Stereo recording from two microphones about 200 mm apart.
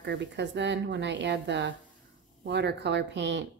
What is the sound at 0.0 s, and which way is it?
Speech, 60° right (ahead or behind).